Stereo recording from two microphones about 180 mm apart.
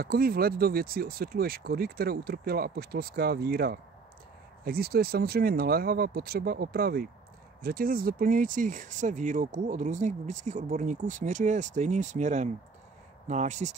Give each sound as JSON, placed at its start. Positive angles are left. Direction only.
{"t": 0.0, "sound": "speech", "side_deg": -55}